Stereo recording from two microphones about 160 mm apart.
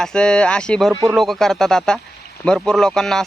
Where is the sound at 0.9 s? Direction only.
20° right (ahead or behind).